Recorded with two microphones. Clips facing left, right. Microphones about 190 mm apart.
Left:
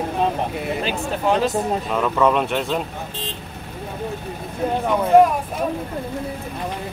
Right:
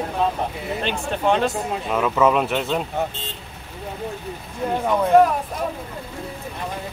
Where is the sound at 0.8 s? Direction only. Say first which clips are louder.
Right 2 dB; 5° left (ahead or behind).